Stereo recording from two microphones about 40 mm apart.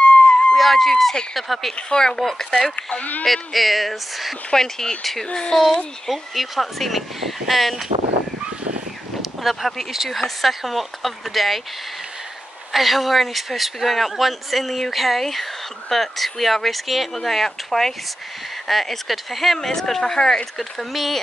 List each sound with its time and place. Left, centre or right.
0.0 s a sound: left
0.6 s speech: centre
1.8 s speech: centre
3.0 s speech: left
3.3 s speech: centre
4.5 s speech: centre
5.2 s speech: centre
6.0 s speech: centre
9.2 s speech: centre
12.7 s speech: centre
20.5 s speech: centre